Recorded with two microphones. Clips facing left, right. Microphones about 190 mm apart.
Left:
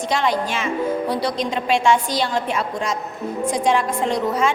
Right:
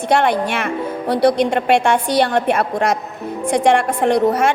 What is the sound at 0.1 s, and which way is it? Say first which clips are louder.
A woman's voice: right 6 dB; 60° right (ahead or behind).